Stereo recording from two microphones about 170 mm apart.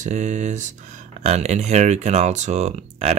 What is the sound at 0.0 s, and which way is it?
Speech, 45° right (ahead or behind).